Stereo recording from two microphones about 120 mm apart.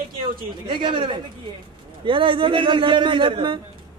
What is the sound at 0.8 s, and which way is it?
A man's voice, 45° right (ahead or behind).